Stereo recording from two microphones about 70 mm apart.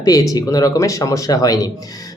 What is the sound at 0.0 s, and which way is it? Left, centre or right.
Speech, left.